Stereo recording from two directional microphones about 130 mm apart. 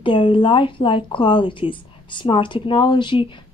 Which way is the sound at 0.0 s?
40° left (ahead or behind).